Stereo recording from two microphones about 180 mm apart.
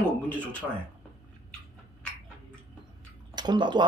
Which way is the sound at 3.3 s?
25° right (ahead or behind).